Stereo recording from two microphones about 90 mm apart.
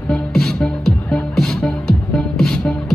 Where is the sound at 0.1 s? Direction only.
5° left (ahead or behind).